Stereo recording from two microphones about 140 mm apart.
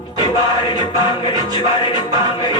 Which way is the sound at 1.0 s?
35° left (ahead or behind).